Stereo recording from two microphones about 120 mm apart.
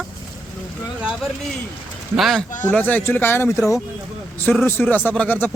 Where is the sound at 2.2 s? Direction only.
Centre (ahead or behind).